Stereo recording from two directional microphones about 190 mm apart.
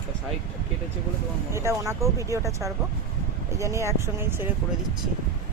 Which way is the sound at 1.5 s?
15° right (ahead or behind).